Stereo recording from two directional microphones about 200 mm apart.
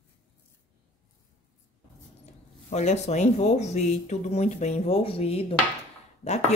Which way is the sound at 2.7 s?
35° left (ahead or behind).